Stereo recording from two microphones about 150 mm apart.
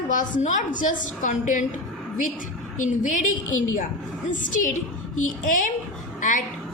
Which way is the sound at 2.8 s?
55° left (ahead or behind).